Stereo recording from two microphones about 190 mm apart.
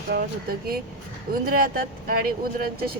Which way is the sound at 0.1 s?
50° right (ahead or behind).